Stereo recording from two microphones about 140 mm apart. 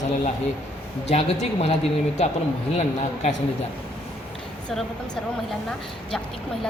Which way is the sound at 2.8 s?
55° left (ahead or behind).